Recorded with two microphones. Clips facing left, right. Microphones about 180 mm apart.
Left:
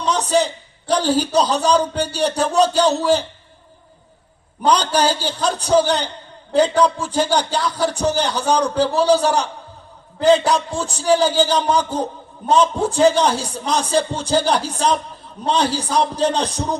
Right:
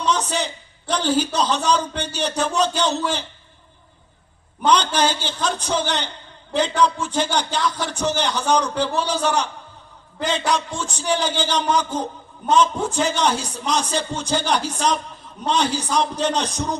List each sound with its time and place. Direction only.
0.0 s a sound: 35° left (ahead or behind)
0.9 s a man's voice: 35° left (ahead or behind)
4.6 s a man's voice: 35° left (ahead or behind)